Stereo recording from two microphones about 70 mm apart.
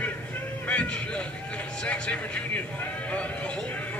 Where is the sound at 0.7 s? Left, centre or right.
Centre.